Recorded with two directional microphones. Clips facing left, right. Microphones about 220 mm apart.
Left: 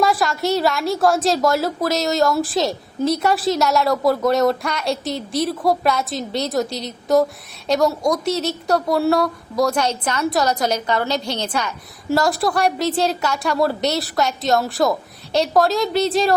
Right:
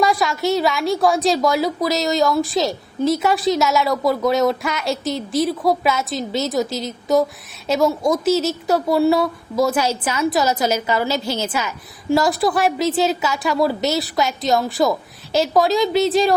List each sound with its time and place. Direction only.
0.0 s a woman's voice: centre (ahead or behind)